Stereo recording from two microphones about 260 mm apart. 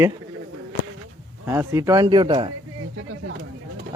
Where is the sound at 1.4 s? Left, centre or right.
Centre.